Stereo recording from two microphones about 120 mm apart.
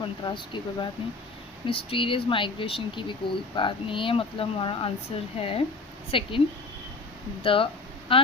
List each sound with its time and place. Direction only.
0.0 s speech: 40° left (ahead or behind)
7.4 s speech: 50° left (ahead or behind)